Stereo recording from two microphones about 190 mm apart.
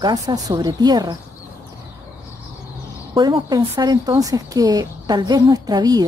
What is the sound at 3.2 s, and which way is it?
Speech, 20° right (ahead or behind).